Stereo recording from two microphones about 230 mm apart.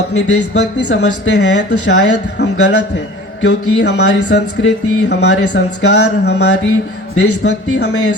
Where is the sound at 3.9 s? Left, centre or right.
Left.